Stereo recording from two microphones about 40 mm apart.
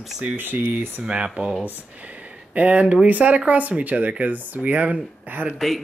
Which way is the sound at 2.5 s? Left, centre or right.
Right.